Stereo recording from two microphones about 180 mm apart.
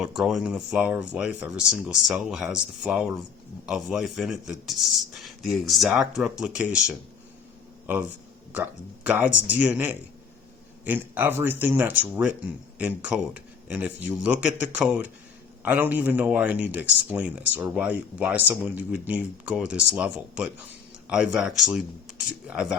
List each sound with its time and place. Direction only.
0.0 s speech: centre (ahead or behind)